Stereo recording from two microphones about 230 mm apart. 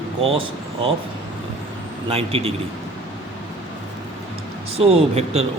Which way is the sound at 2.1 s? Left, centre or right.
Right.